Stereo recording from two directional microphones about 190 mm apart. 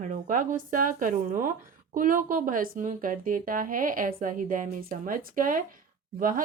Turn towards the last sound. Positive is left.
turn(degrees=-45)  # may be behind; listen again after turning